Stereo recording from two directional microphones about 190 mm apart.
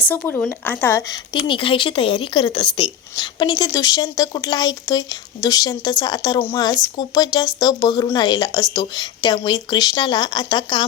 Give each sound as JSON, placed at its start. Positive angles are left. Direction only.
{"t": 0.0, "sound": "speech", "side_deg": 10}
{"t": 1.3, "sound": "speech", "side_deg": 25}